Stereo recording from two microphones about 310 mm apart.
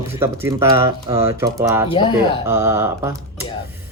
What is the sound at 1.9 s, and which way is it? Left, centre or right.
Speech, centre.